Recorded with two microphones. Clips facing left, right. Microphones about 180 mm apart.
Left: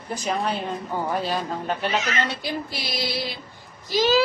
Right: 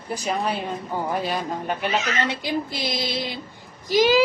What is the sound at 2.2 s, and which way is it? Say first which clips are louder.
Child singing: right 2 dB; 15° right (ahead or behind).